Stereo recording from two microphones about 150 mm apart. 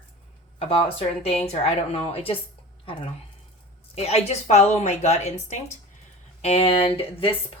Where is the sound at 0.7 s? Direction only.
40° left (ahead or behind).